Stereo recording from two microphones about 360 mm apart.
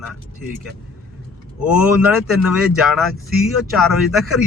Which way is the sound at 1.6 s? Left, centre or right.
Centre.